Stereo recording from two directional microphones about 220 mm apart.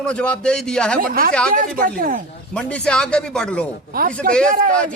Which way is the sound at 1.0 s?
40° right (ahead or behind).